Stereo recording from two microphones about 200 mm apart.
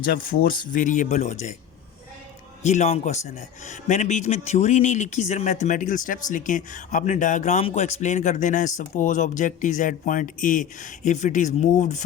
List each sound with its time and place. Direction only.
0.0 s speech: 45° left (ahead or behind)
2.6 s speech: 35° left (ahead or behind)